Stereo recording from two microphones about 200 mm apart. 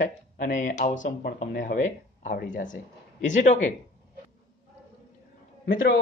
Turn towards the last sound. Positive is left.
turn(degrees=45)  # may be behind; listen again after turning